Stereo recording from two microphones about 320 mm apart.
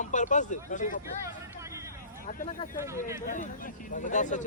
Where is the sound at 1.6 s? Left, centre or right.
Centre.